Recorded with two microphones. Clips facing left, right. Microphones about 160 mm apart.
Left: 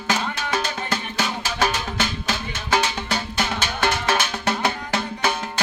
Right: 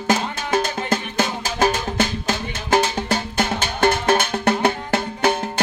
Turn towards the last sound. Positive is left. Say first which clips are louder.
# right 4 dB
turn(degrees=-55)  # may be behind; listen again after turning